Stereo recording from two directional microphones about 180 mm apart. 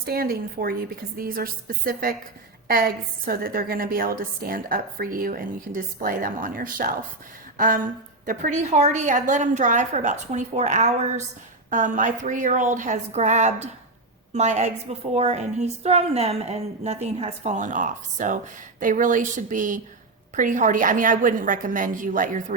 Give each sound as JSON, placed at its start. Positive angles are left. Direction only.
{"t": 0.0, "sound": "a woman's voice", "side_deg": -55}
{"t": 7.5, "sound": "a sound", "side_deg": -50}
{"t": 8.2, "sound": "a woman's voice", "side_deg": -45}